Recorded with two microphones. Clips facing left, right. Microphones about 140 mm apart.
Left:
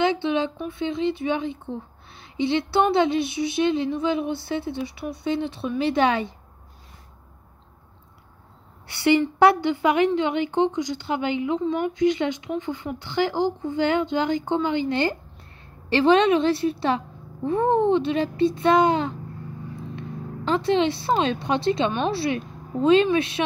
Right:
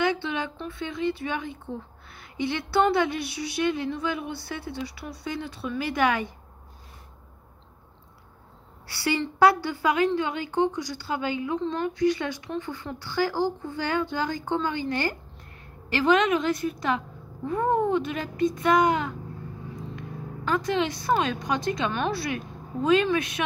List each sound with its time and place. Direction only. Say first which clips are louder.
0.0 s speech: left 5 dB; 20° left (ahead or behind)
8.8 s a woman's voice: left 8 dB; 20° left (ahead or behind)